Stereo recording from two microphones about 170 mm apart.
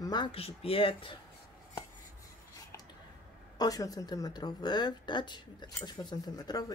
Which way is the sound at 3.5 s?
20° left (ahead or behind).